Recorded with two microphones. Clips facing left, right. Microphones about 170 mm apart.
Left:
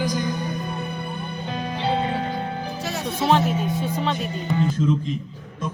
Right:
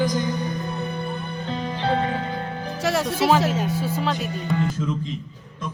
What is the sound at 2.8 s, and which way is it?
Music, 85° right.